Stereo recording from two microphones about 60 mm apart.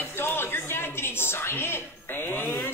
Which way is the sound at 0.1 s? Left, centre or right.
Left.